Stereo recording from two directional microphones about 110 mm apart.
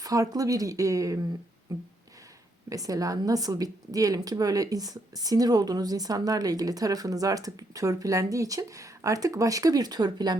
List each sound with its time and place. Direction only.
0.0 s a woman's voice: 35° right (ahead or behind)